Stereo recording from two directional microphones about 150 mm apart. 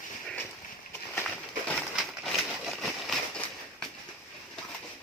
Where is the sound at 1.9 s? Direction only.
Centre (ahead or behind).